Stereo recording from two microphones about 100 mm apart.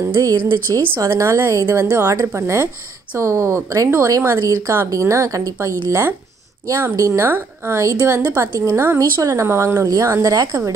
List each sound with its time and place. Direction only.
0.3 s speech: 35° right (ahead or behind)
1.1 s speech: 25° right (ahead or behind)